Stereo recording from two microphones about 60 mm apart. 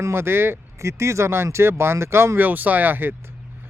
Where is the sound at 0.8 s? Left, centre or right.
Right.